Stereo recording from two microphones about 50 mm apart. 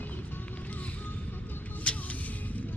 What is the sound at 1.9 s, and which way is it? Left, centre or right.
Vehicle, left.